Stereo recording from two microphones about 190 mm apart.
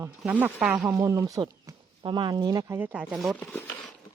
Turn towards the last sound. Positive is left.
turn(degrees=0)  # may be behind; listen again after turning